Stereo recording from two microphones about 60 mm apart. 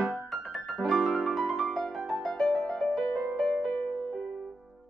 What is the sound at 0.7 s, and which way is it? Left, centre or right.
Piano, centre.